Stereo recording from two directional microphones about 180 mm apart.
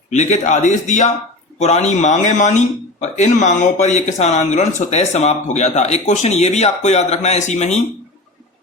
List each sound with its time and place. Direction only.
0.1 s speech: 40° left (ahead or behind)